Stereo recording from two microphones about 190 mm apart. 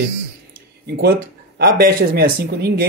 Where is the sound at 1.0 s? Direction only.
55° right (ahead or behind).